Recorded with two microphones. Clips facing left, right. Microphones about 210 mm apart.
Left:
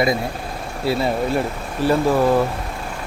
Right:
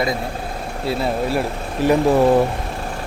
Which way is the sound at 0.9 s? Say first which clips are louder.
Left 1 dB; centre (ahead or behind).